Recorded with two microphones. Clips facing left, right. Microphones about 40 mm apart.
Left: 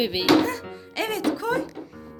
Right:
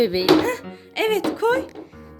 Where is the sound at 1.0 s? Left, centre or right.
Right.